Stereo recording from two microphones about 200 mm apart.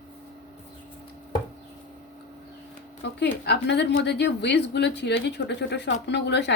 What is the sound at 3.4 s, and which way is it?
Speech, 60° left (ahead or behind).